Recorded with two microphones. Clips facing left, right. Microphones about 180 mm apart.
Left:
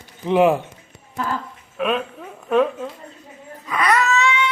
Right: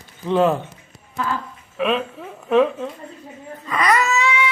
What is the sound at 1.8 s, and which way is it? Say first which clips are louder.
Speech: right 1 dB; centre (ahead or behind).